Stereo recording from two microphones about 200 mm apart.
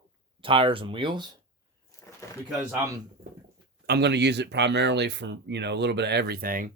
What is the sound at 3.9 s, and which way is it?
Speech, 55° right (ahead or behind).